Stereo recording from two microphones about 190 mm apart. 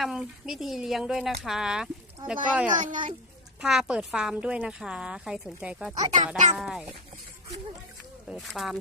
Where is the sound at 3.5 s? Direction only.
5° right (ahead or behind).